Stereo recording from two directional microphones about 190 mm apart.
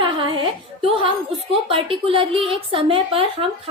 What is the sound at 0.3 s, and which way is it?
Music, 30° right (ahead or behind).